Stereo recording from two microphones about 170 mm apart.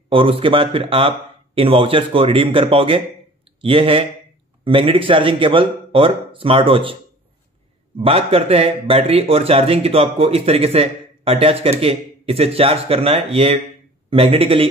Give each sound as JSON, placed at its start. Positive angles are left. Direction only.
{"t": 0.1, "sound": "a man's voice", "side_deg": -30}
{"t": 8.0, "sound": "a man's voice", "side_deg": -35}